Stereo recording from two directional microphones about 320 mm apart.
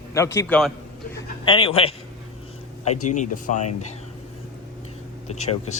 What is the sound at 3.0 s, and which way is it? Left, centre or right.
Speech, left.